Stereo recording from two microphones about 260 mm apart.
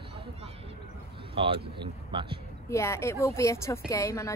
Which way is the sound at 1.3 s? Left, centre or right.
Right.